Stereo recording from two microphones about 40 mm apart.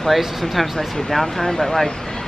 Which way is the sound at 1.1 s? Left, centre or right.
Centre.